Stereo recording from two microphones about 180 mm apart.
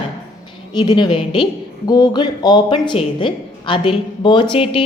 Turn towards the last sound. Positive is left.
turn(degrees=30)  # may be behind; listen again after turning